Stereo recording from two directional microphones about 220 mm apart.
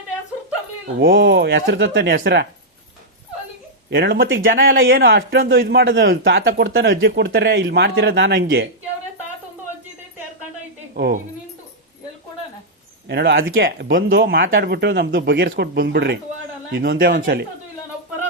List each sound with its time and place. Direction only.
0.9 s speech: 55° right (ahead or behind)
3.8 s speech: 50° right (ahead or behind)
4.4 s speech: 60° right (ahead or behind)
10.9 s speech: 45° right (ahead or behind)
13.1 s speech: 50° right (ahead or behind)